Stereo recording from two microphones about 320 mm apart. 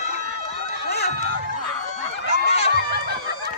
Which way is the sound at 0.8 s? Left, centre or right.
Left.